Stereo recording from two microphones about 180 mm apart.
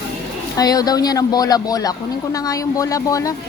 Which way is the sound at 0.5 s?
20° left (ahead or behind).